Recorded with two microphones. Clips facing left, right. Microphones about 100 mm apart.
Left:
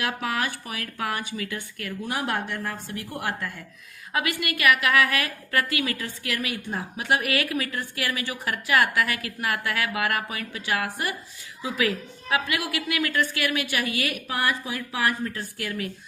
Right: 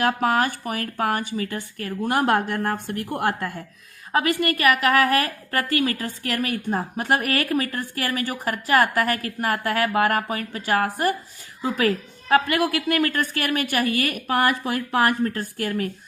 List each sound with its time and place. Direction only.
0.0 s a woman's voice: 45° right (ahead or behind)
14.3 s speech: 65° right (ahead or behind); by 15.9 s 45° right (ahead or behind)